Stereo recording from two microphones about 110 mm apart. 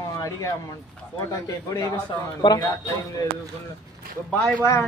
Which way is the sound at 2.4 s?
45° left (ahead or behind).